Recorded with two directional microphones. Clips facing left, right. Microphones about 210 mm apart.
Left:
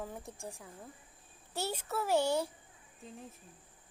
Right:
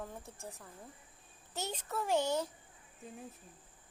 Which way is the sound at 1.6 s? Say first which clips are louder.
Left 3 dB; 10° left (ahead or behind).